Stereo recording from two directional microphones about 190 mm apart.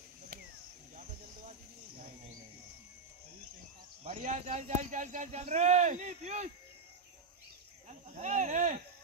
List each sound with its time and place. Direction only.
4.0 s speech: 40° right (ahead or behind)
7.9 s speech: 40° right (ahead or behind)